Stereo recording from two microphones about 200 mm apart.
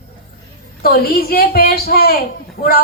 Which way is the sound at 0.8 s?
50° left (ahead or behind).